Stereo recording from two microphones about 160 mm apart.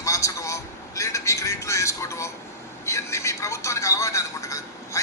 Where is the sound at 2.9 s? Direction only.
20° left (ahead or behind).